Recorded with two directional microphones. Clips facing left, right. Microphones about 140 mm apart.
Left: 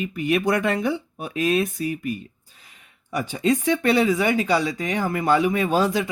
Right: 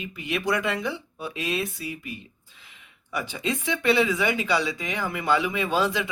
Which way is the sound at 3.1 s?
45° left (ahead or behind).